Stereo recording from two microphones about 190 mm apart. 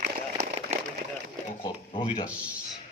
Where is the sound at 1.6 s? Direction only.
30° left (ahead or behind).